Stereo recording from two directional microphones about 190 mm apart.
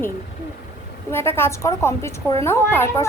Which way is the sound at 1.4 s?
15° left (ahead or behind).